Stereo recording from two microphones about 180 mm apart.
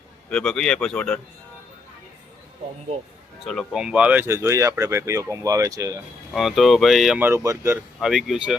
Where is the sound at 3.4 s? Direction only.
Centre (ahead or behind); by 6.0 s 20° right (ahead or behind).